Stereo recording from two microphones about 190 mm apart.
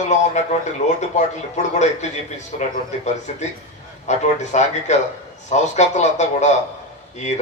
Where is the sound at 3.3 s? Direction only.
40° left (ahead or behind).